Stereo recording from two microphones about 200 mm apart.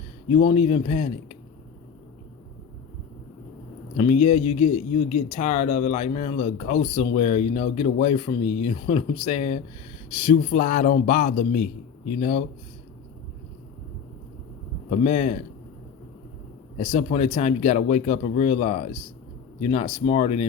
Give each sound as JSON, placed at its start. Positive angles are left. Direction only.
{"t": 0.3, "sound": "speech", "side_deg": 30}
{"t": 3.9, "sound": "speech", "side_deg": 35}
{"t": 14.8, "sound": "speech", "side_deg": 40}
{"t": 16.7, "sound": "speech", "side_deg": 35}